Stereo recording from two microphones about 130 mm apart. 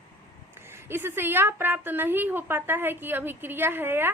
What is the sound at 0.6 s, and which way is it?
Speech, 20° right (ahead or behind).